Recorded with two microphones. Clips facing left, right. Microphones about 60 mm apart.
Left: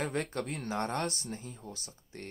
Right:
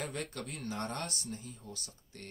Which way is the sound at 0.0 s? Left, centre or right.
Left.